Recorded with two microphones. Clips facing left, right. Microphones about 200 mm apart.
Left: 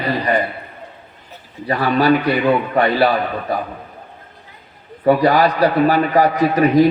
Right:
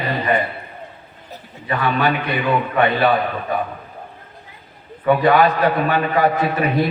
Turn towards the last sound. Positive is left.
turn(degrees=40)  # may be behind; listen again after turning